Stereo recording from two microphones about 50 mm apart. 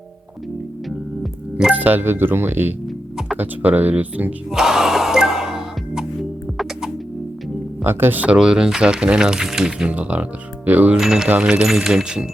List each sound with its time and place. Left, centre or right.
1.8 s speech: right
4.5 s music: centre
7.9 s speech: right
8.4 s speech: centre
9.9 s speech: right
10.9 s speech: centre